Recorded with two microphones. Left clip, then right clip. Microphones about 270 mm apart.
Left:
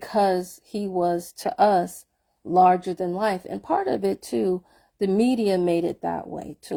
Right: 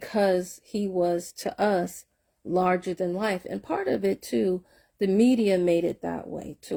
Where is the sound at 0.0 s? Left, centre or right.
Centre.